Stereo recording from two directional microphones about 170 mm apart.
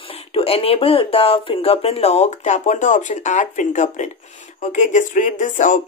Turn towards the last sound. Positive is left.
turn(degrees=50)  # may be behind; listen again after turning